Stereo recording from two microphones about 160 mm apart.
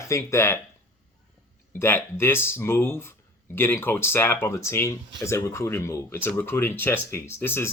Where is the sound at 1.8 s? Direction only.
15° left (ahead or behind).